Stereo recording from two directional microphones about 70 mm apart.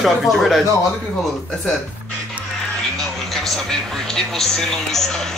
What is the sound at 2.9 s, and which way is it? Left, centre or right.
Speech, centre.